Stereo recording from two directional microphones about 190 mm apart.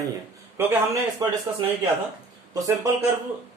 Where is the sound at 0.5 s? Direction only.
15° right (ahead or behind).